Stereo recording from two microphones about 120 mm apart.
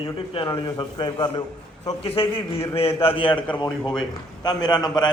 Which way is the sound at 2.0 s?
50° left (ahead or behind).